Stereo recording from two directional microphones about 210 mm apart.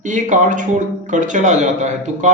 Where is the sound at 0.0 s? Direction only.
35° right (ahead or behind).